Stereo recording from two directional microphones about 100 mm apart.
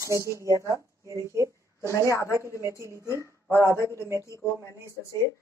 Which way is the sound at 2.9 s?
30° right (ahead or behind).